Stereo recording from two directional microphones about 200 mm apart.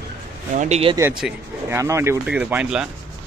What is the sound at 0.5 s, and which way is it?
Speech, 35° right (ahead or behind).